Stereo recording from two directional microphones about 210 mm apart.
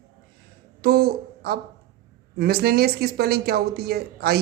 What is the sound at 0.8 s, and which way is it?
A woman's voice, 50° right (ahead or behind).